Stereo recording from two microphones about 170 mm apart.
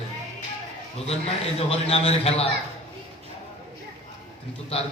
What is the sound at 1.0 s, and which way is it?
A man's voice, 35° left (ahead or behind).